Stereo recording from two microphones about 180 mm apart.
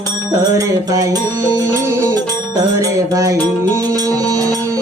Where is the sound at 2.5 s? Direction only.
20° right (ahead or behind).